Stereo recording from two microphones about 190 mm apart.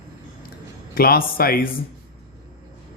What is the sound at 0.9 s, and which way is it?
Speech, 50° left (ahead or behind).